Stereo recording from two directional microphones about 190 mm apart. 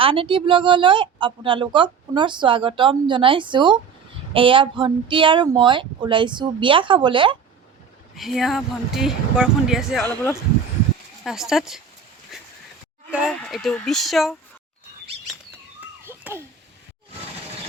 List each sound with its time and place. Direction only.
0.0 s a woman's voice: 30° right (ahead or behind)
8.1 s speech: centre (ahead or behind)
10.0 s speech: 10° left (ahead or behind)
11.2 s speech: centre (ahead or behind)
12.3 s a sound: centre (ahead or behind)
13.1 s speech: 5° right (ahead or behind)
16.0 s a sound: 10° right (ahead or behind)